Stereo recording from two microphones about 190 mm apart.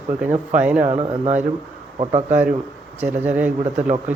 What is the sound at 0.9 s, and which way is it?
Speech, 35° right (ahead or behind).